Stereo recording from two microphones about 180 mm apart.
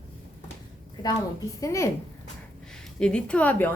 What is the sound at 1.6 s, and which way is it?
Speech, 15° left (ahead or behind).